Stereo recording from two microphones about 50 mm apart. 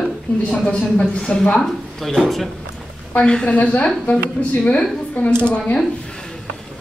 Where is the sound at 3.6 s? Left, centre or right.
Left.